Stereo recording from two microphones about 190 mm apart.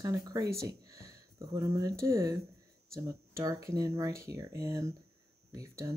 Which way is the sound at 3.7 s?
20° right (ahead or behind).